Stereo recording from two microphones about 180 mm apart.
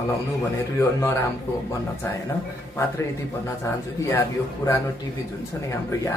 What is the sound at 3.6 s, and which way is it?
Speech, 15° left (ahead or behind).